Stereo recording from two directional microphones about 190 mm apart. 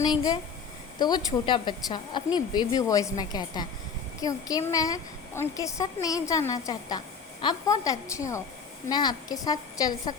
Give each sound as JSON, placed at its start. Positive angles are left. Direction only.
{"t": 0.0, "sound": "a woman's voice", "side_deg": 20}